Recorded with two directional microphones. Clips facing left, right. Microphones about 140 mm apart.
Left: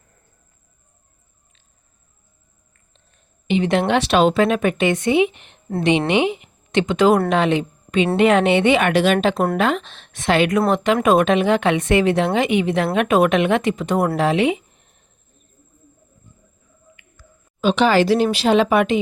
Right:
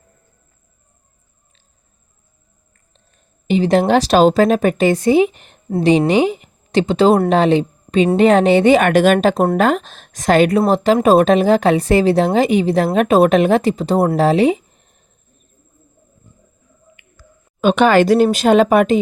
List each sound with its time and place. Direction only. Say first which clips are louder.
3.4 s speech: right 4 dB; 40° right (ahead or behind)
17.6 s speech: right 4 dB; 55° right (ahead or behind)